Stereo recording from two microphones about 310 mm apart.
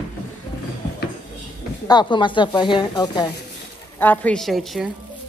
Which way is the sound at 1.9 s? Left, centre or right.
Centre.